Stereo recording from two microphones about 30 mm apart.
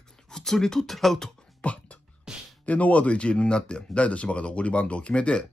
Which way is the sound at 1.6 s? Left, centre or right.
Left.